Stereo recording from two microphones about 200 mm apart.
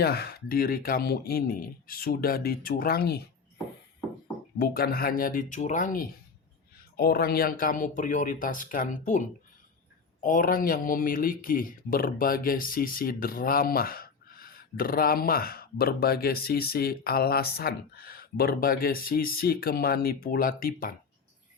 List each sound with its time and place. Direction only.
0.0 s speech: 55° left (ahead or behind)
4.5 s speech: 50° left (ahead or behind)